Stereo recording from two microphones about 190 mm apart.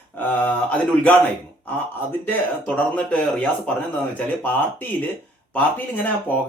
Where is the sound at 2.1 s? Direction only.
10° left (ahead or behind).